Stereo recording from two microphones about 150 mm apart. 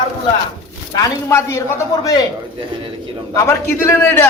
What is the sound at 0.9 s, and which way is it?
Speech, 20° left (ahead or behind).